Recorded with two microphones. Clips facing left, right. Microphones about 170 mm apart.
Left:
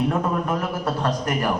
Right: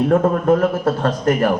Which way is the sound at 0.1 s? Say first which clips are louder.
Right 9 dB; 50° right (ahead or behind).